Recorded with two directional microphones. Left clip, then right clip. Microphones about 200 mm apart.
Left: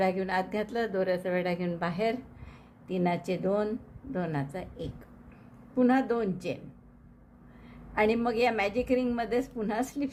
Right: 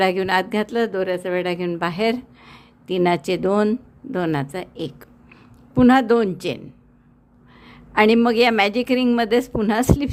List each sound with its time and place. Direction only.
0.0 s a woman's voice: 40° right (ahead or behind)
7.6 s a woman's voice: 40° right (ahead or behind)